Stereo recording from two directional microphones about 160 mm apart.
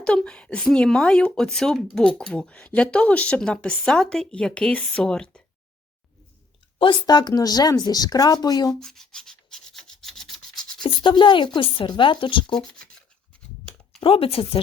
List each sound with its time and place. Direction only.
0.0 s speech: 5° left (ahead or behind)
6.7 s speech: 30° left (ahead or behind)
8.7 s rub: centre (ahead or behind)
10.8 s speech: 30° left (ahead or behind)
12.5 s speech: 5° left (ahead or behind)
14.0 s speech: 35° left (ahead or behind)